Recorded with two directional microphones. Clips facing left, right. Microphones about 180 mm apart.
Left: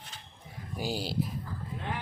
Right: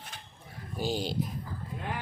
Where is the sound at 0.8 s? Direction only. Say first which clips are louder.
Right 2 dB; 10° left (ahead or behind).